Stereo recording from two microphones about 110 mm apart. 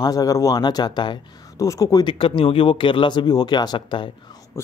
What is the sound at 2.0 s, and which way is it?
Speech, 50° left (ahead or behind).